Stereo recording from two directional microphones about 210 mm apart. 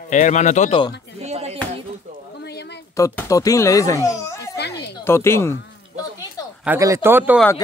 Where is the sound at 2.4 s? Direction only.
55° left (ahead or behind).